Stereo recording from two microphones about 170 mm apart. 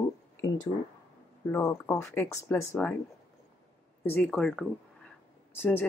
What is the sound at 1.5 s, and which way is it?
Speech, 15° left (ahead or behind).